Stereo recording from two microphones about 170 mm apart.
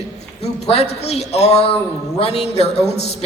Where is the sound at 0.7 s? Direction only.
40° left (ahead or behind).